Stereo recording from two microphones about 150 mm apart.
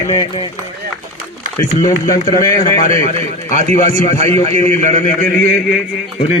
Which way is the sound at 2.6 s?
65° left (ahead or behind).